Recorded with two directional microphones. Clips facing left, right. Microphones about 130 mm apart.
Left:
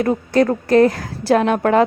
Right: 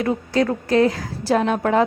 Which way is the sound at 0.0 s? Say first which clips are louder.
Left 4 dB; 50° left (ahead or behind).